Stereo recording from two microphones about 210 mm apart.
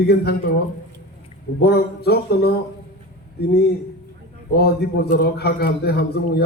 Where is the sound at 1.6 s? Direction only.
50° left (ahead or behind).